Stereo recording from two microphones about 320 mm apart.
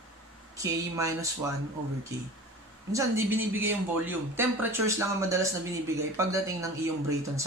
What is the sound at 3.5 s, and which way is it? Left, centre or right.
Speech, centre.